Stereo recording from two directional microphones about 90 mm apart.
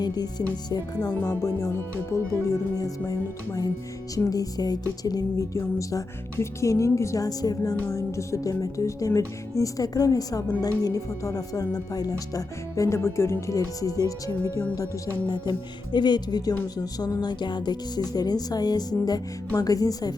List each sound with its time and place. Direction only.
0.0 s speech: 50° left (ahead or behind)
3.1 s music: 40° left (ahead or behind)
14.8 s speech: 50° left (ahead or behind)